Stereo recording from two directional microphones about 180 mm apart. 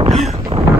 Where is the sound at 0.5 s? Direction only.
30° right (ahead or behind).